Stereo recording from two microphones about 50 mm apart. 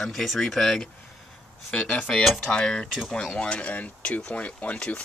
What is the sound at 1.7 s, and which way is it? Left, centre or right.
Speech, left.